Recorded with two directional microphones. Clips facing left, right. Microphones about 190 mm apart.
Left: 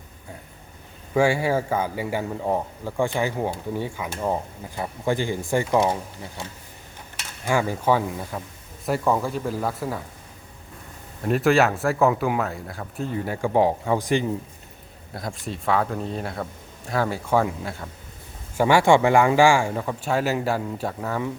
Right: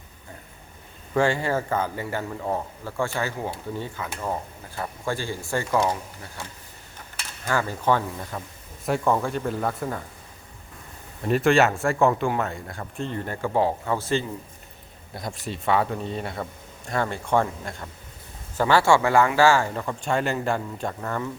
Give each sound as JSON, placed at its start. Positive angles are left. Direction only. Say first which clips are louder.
{"t": 1.1, "sound": "speech", "louder": "left 2 dB", "side_deg": 10}
{"t": 7.4, "sound": "speech", "louder": "left 2 dB", "side_deg": 15}
{"t": 11.2, "sound": "speech", "louder": "even", "side_deg": 0}
{"t": 15.1, "sound": "speech", "louder": "left 1 dB", "side_deg": 0}